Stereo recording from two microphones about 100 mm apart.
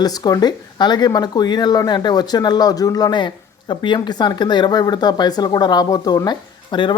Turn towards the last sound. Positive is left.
turn(degrees=50)  # may be behind; listen again after turning